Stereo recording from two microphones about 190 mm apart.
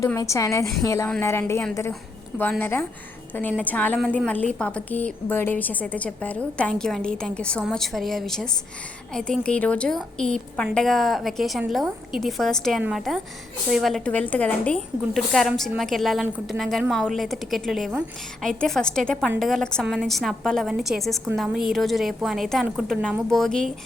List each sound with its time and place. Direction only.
0.0 s a woman's voice: 15° left (ahead or behind)